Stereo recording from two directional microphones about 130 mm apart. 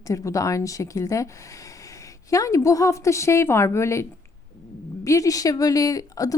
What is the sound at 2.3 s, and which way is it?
Speech, 25° left (ahead or behind).